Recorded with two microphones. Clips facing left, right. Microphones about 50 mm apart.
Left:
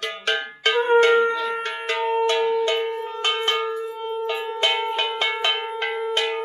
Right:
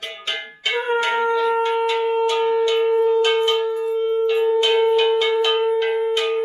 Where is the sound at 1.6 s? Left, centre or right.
Left.